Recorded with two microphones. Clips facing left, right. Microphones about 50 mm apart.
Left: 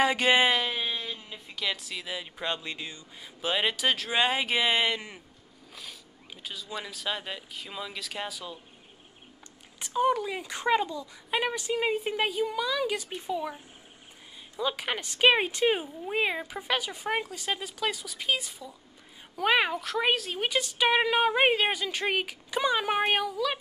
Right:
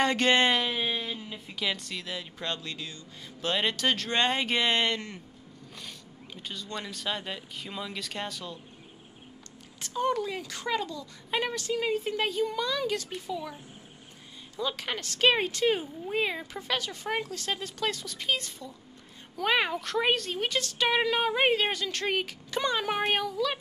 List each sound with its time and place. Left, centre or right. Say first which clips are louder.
0.0 s a woman's voice: left 1 dB; centre
3.4 s a woman's voice: even; centre
9.8 s a woman's voice: left 3 dB; centre
10.4 s a woman's voice: left 5 dB; left
14.6 s a woman's voice: left 2 dB; centre